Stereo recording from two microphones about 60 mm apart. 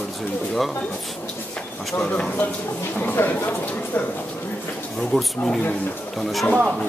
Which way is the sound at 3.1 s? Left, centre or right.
Left.